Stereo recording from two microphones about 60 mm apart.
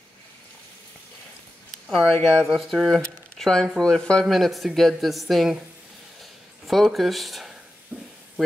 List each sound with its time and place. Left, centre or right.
1.9 s speech: centre
3.3 s a sound: centre
3.8 s speech: centre
4.3 s speech: centre
6.7 s speech: centre
7.9 s a sound: right